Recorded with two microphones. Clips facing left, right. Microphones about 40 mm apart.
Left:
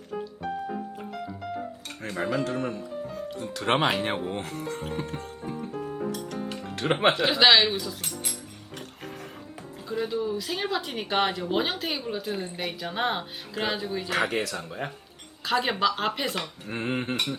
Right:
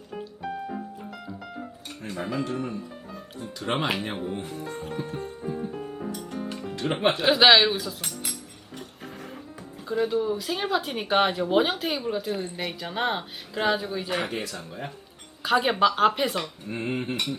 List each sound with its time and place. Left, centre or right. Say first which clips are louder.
2.3 s speech: even; left
6.1 s music: left 1 dB; left
6.5 s music: left 1 dB; left
7.0 s speech: left 1 dB; left
7.3 s speech: right 4 dB; centre
9.9 s speech: right 3 dB; centre
14.1 s speech: left 5 dB; left
15.4 s speech: right 3 dB; centre
16.6 s cutlery: left 3 dB; left